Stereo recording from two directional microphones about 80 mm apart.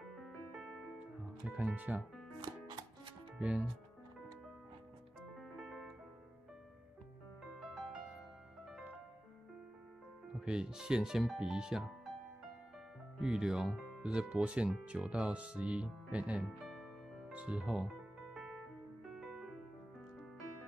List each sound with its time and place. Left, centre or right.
1.6 s speech: centre
3.3 s speech: centre
5.3 s keyboard: centre
7.6 s music: centre
10.3 s speech: centre
13.2 s speech: centre
16.6 s music: centre
17.3 s speech: centre
18.3 s music: centre